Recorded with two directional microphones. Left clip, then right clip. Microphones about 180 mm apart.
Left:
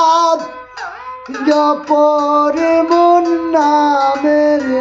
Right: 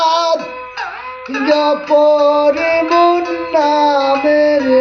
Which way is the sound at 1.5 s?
15° left (ahead or behind).